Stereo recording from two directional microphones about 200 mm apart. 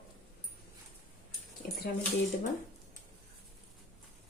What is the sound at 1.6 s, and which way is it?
Speech, 50° left (ahead or behind).